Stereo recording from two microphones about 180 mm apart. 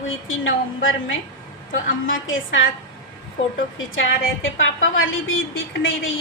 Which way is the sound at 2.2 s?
90° left.